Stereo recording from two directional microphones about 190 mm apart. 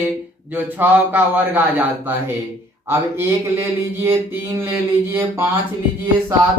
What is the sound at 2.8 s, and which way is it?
Speech, 10° right (ahead or behind).